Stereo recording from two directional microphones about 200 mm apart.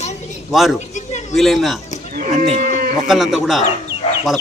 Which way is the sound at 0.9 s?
35° left (ahead or behind).